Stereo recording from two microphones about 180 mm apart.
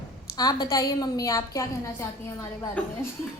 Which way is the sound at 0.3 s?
20° left (ahead or behind).